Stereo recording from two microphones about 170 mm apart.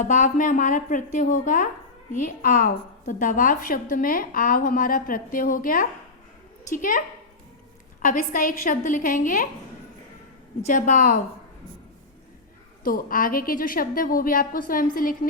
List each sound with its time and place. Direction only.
0.0 s a woman's voice: 50° left (ahead or behind)
8.0 s a woman's voice: 50° left (ahead or behind)
10.7 s a woman's voice: 50° left (ahead or behind)
12.8 s a woman's voice: 55° left (ahead or behind)